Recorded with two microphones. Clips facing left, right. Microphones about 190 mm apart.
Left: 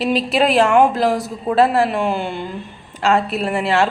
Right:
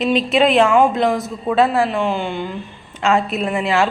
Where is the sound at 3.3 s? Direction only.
35° left (ahead or behind).